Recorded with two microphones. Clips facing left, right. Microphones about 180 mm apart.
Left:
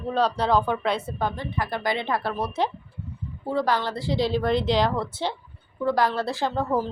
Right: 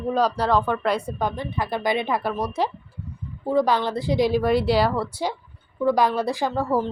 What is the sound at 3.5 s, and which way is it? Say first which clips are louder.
Speech: right 4 dB; 20° right (ahead or behind).